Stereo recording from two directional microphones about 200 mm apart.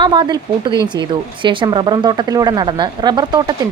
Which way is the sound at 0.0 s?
20° right (ahead or behind).